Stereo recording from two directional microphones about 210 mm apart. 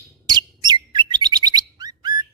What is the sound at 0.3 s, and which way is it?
Bird, 20° right (ahead or behind).